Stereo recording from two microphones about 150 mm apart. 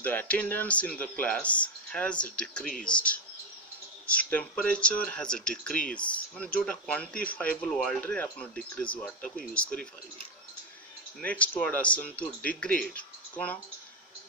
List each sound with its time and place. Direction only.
0.0 s speech: 10° left (ahead or behind)
4.3 s speech: 10° left (ahead or behind)
11.1 s speech: 10° left (ahead or behind)